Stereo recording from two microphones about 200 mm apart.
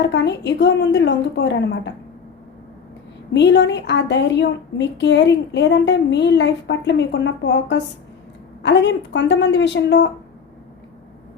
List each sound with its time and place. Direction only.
0.0 s a woman's voice: 60° left (ahead or behind)
3.3 s a woman's voice: 60° left (ahead or behind)